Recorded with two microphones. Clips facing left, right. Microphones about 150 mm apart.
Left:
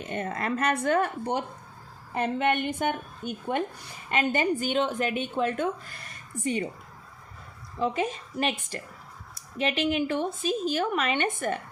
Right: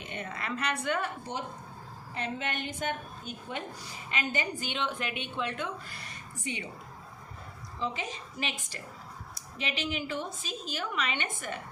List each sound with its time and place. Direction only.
0.0 s a woman's voice: 45° left (ahead or behind)
7.8 s a woman's voice: 50° left (ahead or behind)